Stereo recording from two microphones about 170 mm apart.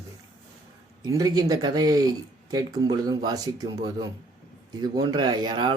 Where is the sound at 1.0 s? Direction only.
20° right (ahead or behind).